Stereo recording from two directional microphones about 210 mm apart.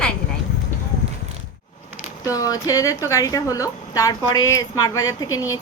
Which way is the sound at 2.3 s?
15° left (ahead or behind).